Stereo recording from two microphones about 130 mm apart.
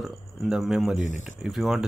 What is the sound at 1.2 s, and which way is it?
Speech, centre (ahead or behind).